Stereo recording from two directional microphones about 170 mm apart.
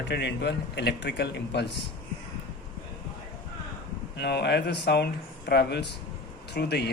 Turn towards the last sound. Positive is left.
turn(degrees=75)  # may be behind; listen again after turning